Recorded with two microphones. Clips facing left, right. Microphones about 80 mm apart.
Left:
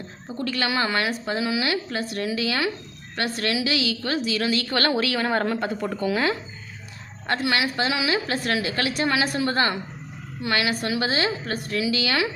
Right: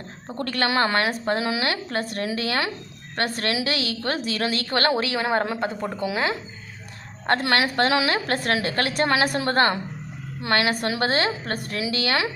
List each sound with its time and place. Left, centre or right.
0.3 s a woman's voice: right
7.3 s a woman's voice: right